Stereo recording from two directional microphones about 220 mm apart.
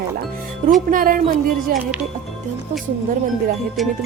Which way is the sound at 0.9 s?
40° right (ahead or behind).